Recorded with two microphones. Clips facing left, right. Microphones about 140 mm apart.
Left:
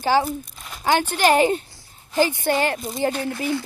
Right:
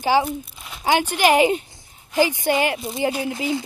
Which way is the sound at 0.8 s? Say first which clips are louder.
Even; 15° right (ahead or behind).